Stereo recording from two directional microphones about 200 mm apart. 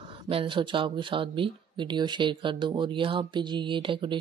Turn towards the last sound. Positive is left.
turn(degrees=-25)  # may be behind; listen again after turning